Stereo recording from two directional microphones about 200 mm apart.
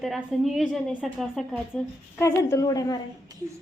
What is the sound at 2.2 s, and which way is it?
Speech, 15° left (ahead or behind).